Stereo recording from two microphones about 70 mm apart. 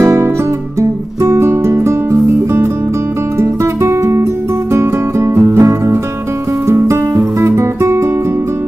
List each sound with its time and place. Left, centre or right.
0.0 s guitar: right
0.7 s music: right